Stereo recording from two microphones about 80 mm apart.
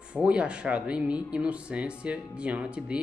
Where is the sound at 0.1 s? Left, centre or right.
Centre.